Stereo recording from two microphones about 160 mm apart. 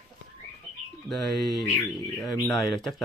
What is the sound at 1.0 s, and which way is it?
A man's voice, centre (ahead or behind).